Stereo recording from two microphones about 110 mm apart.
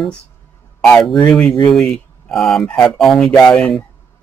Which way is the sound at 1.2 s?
10° left (ahead or behind).